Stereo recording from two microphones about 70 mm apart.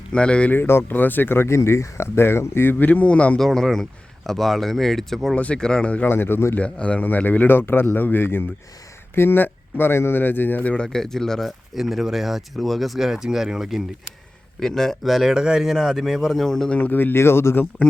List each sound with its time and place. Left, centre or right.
0.1 s speech: centre
0.5 s speech: left
3.3 s speech: centre
5.4 s speech: centre
6.1 s speech: left
6.6 s a man's voice: centre
10.8 s speech: centre
14.6 s speech: centre
16.7 s a man's voice: left